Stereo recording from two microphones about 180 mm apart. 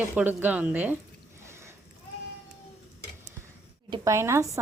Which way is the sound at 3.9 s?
15° right (ahead or behind).